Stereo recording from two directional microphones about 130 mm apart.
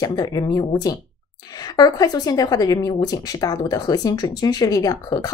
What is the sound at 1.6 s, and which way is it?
Speech, 30° left (ahead or behind).